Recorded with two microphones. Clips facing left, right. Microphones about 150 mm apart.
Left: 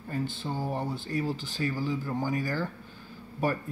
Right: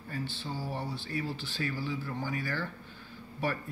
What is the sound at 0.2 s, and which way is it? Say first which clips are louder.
Speech: left 5 dB; 45° left (ahead or behind).